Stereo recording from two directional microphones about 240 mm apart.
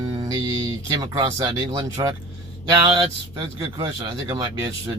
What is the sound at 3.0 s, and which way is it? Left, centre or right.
Speech, centre.